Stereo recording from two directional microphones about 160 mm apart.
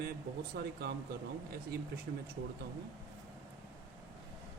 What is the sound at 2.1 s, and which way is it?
Speech, 85° right.